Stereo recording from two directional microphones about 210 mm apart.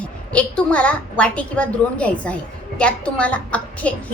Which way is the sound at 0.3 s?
5° left (ahead or behind).